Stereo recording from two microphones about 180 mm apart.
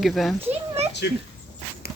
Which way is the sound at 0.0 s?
Centre (ahead or behind).